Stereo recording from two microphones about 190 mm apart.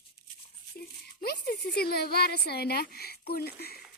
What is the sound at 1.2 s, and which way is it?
Speech, 55° left (ahead or behind).